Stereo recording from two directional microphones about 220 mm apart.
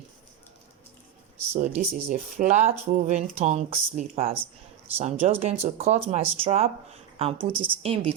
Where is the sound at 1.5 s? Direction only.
30° right (ahead or behind).